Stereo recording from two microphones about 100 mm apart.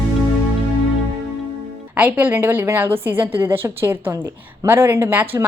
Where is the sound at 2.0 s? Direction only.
15° right (ahead or behind).